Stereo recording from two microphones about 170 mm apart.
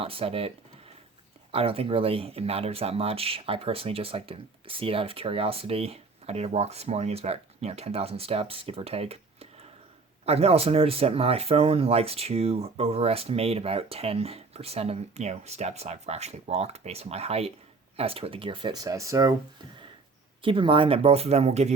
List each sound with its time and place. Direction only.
0.0 s speech: 35° right (ahead or behind)
1.5 s speech: 35° right (ahead or behind)
20.4 s speech: 30° right (ahead or behind)